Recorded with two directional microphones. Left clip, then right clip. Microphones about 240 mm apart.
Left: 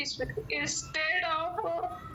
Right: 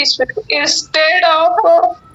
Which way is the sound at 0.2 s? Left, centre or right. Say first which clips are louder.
Right 18 dB; right.